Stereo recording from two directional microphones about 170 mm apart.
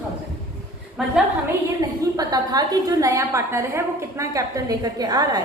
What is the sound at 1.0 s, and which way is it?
Speech, centre (ahead or behind).